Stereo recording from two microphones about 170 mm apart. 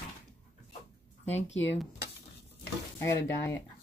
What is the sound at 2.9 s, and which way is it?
Speech, 15° left (ahead or behind).